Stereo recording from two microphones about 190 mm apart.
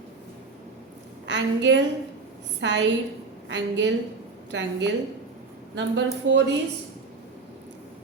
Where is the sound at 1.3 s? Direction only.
70° right (ahead or behind).